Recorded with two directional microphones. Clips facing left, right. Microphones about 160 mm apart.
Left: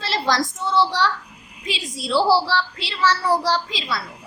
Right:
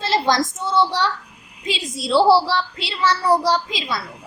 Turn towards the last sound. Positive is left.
turn(degrees=-15)  # may be behind; listen again after turning